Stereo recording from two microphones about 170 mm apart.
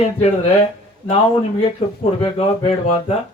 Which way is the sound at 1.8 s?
35° left (ahead or behind).